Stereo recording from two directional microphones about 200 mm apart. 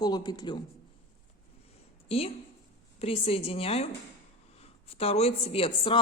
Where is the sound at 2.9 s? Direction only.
30° left (ahead or behind).